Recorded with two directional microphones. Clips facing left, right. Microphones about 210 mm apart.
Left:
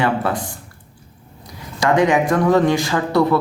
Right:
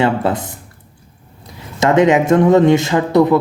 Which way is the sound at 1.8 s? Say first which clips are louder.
Right 4 dB; 25° right (ahead or behind).